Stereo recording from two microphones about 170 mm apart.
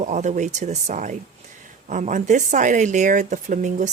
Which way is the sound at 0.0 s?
45° right (ahead or behind).